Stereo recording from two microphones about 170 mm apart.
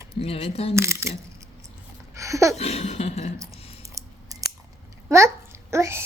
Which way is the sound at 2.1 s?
20° right (ahead or behind).